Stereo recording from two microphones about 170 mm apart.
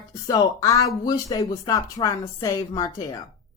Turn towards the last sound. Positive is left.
turn(degrees=20)  # may be behind; listen again after turning